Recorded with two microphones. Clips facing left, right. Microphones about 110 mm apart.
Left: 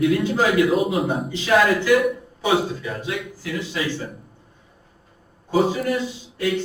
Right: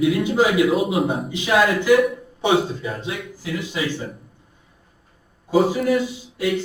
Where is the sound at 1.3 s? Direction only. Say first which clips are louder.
Left 1 dB; 15° right (ahead or behind).